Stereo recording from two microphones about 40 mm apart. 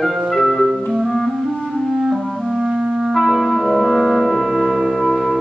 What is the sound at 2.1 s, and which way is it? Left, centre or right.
Music, centre.